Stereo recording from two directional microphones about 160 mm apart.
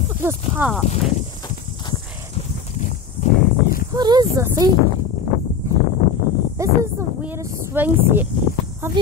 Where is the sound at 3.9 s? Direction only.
25° right (ahead or behind).